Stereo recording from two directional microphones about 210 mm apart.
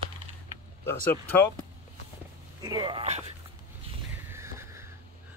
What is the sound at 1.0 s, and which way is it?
Speech, 10° left (ahead or behind).